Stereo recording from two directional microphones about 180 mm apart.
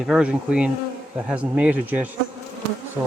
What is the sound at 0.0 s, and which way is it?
Insect, 5° right (ahead or behind).